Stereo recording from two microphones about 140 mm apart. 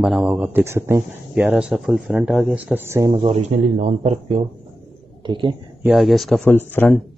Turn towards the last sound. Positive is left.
turn(degrees=15)  # may be behind; listen again after turning